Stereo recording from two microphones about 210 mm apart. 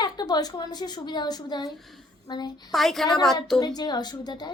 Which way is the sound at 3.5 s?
20° left (ahead or behind).